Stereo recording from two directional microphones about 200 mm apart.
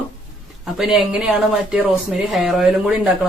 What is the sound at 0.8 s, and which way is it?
Speech, centre (ahead or behind).